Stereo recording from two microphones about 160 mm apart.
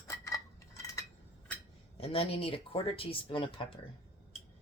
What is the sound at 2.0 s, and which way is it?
Speech, 35° left (ahead or behind).